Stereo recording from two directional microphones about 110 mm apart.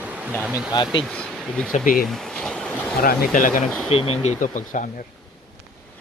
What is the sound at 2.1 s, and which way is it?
Boat, 5° left (ahead or behind).